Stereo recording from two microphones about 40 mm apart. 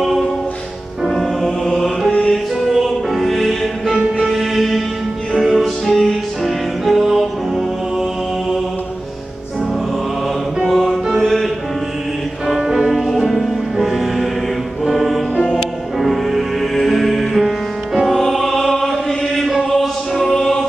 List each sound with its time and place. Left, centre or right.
1.0 s music: centre
2.3 s music: centre
10.6 s music: centre
12.4 s music: centre
14.9 s choir: centre
16.0 s music: centre
20.3 s choir: centre